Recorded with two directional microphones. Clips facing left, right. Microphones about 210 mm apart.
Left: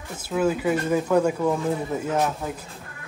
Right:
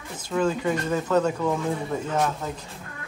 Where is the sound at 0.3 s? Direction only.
5° left (ahead or behind).